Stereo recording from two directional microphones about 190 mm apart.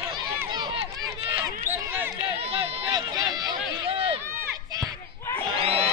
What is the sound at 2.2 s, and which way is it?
Run, 30° right (ahead or behind).